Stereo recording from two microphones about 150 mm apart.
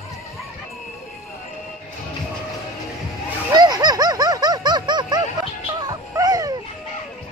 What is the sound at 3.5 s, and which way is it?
Music, 25° right (ahead or behind).